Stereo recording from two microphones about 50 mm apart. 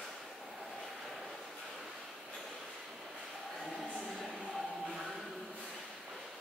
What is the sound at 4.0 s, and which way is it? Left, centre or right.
Train, centre.